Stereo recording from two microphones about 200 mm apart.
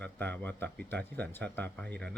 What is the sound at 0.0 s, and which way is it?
Speech, 10° left (ahead or behind).